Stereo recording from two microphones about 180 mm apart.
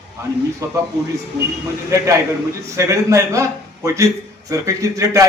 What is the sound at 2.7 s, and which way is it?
A man's voice, 15° right (ahead or behind).